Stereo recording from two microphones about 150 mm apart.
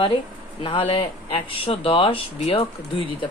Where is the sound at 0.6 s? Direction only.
35° left (ahead or behind).